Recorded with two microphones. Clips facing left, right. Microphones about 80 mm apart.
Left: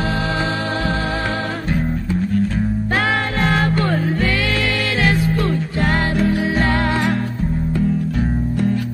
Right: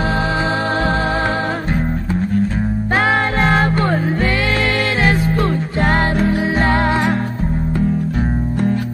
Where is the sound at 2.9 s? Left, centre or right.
Right.